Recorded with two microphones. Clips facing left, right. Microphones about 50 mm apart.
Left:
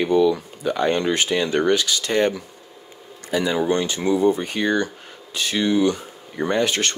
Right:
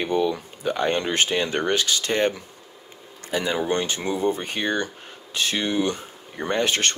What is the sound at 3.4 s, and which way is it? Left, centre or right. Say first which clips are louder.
Speech: left 3 dB; right.